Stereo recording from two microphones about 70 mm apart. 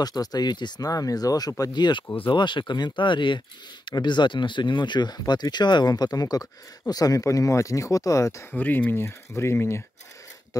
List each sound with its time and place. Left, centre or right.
0.0 s speech: left
1.6 s speech: left
8.5 s speech: left
10.5 s a sound: left